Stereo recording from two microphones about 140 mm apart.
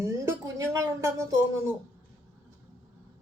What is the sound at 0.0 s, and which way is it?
Music, 20° right (ahead or behind).